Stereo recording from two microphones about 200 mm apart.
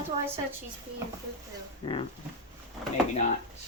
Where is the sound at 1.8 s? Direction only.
25° left (ahead or behind).